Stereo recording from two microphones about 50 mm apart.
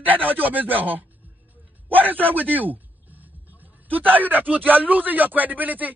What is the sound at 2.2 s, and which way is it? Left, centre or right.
Music, right.